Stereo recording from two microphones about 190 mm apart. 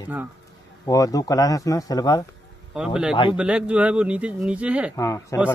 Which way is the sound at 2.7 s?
5° right (ahead or behind).